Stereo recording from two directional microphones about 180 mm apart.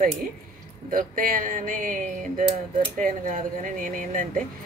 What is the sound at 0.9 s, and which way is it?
Music, 50° right (ahead or behind).